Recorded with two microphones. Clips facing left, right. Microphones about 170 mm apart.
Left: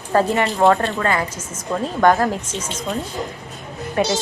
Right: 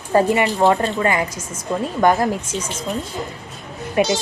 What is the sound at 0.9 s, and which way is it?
Speech, 15° right (ahead or behind).